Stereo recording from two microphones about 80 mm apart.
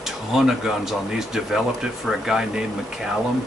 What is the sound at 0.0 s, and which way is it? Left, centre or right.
Speech, centre.